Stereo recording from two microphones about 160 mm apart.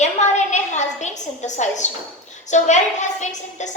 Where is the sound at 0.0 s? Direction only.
45° left (ahead or behind).